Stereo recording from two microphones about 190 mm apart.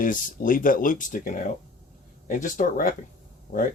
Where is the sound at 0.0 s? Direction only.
45° left (ahead or behind).